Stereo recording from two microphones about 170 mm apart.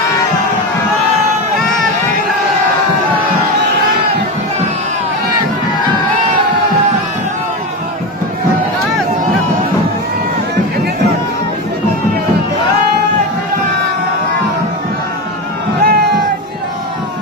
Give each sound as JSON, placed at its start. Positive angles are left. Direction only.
{"t": 15.8, "sound": "music", "side_deg": -65}